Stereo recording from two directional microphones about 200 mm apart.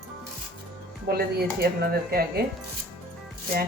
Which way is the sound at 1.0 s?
50° right (ahead or behind).